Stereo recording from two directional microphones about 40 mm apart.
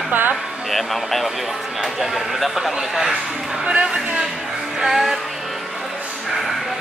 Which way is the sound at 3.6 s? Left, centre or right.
Right.